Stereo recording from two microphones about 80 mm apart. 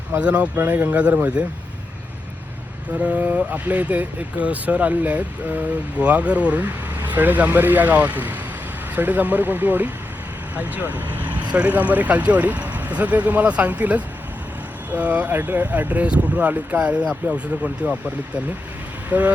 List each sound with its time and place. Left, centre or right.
0.2 s speech: centre
2.9 s speech: centre
19.1 s speech: centre